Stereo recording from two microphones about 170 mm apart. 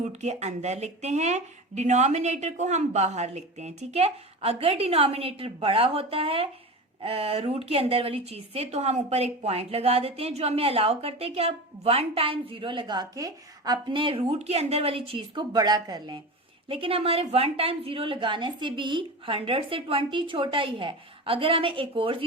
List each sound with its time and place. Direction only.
0.0 s a woman's voice: 40° right (ahead or behind)